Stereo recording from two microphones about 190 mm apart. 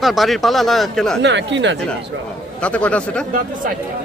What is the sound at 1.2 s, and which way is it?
Speech, 65° right (ahead or behind).